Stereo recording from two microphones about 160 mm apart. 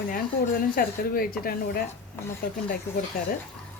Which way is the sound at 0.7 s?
65° left (ahead or behind).